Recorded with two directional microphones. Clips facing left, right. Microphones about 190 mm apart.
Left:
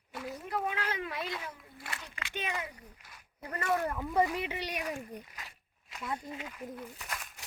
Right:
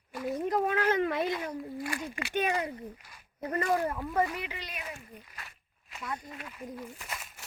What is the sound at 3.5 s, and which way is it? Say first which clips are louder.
Speech: right 3 dB; 25° right (ahead or behind).